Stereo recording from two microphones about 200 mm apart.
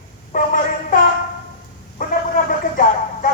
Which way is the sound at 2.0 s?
45° left (ahead or behind).